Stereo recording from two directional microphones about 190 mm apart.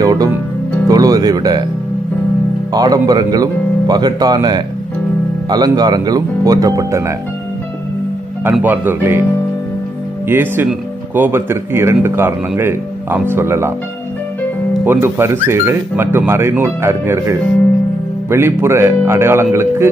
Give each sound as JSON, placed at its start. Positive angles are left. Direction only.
{"t": 0.0, "sound": "music", "side_deg": -20}
{"t": 2.7, "sound": "speech", "side_deg": -20}
{"t": 8.5, "sound": "speech", "side_deg": -10}
{"t": 10.2, "sound": "speech", "side_deg": -10}
{"t": 14.9, "sound": "speech", "side_deg": -10}